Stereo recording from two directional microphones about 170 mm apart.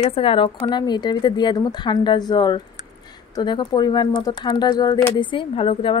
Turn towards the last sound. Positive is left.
turn(degrees=30)  # may be behind; listen again after turning